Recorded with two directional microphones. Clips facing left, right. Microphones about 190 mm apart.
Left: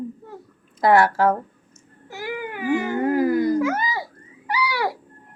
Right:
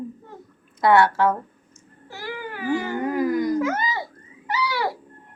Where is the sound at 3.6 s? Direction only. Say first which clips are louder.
Left 1 dB; 10° left (ahead or behind).